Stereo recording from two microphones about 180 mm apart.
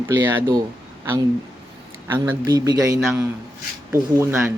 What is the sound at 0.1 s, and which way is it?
Speech, 15° right (ahead or behind).